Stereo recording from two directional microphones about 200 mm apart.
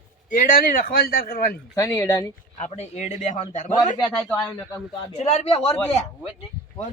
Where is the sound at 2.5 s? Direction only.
35° left (ahead or behind).